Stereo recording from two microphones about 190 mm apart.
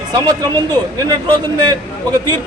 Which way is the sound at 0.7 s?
20° right (ahead or behind).